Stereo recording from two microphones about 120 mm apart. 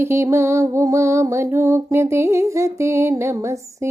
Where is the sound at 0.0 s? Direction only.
25° right (ahead or behind).